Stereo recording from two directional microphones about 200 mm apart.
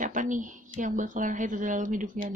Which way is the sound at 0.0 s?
40° right (ahead or behind).